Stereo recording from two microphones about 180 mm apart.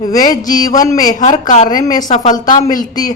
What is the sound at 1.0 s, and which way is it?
Speech, 40° left (ahead or behind).